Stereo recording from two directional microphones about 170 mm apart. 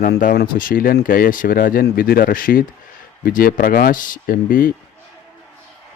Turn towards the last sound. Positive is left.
turn(degrees=55)  # may be behind; listen again after turning